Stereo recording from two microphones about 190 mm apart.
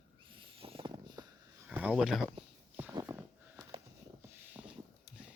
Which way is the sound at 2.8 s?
10° right (ahead or behind).